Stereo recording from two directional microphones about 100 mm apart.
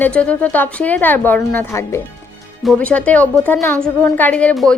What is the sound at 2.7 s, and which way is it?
Speech, 15° left (ahead or behind).